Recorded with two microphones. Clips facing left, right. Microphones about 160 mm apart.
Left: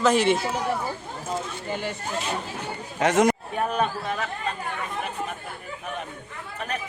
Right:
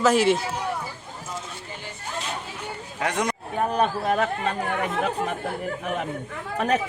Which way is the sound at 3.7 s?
45° right (ahead or behind).